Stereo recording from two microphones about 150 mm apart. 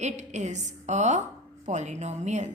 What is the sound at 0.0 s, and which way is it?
A woman's voice, 50° right (ahead or behind).